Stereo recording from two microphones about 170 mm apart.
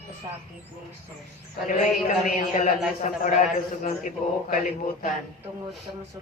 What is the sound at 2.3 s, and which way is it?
A man's voice, 50° left (ahead or behind).